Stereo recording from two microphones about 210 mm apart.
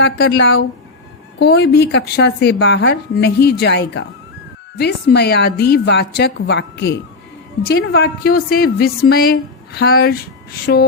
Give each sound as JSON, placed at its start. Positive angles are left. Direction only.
{"t": 0.0, "sound": "a woman's voice", "side_deg": 55}
{"t": 10.7, "sound": "speech", "side_deg": 60}